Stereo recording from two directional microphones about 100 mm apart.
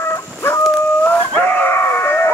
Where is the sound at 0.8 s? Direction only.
15° left (ahead or behind).